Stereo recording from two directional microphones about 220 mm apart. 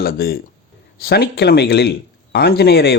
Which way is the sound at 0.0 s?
45° left (ahead or behind).